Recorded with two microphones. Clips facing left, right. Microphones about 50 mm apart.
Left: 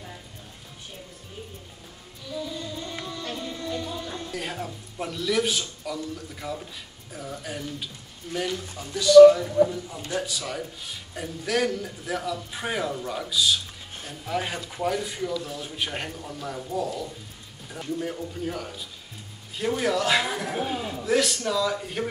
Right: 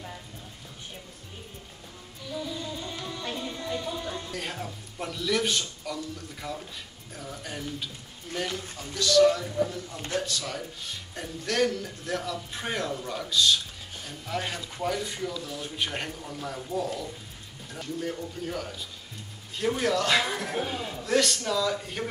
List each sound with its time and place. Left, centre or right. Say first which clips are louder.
2.4 s music: left 1 dB; centre
3.4 s music: left 2 dB; centre
4.1 s a man's voice: left 2 dB; centre
17.6 s a man's voice: left 2 dB; centre